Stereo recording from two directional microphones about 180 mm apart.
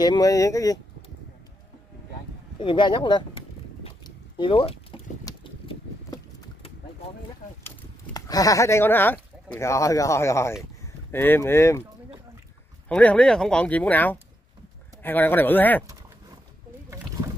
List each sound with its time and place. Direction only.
0.0 s speech: 20° left (ahead or behind)
2.6 s a sound: 25° left (ahead or behind)
7.6 s speech: 20° left (ahead or behind)
12.8 s speech: 5° left (ahead or behind)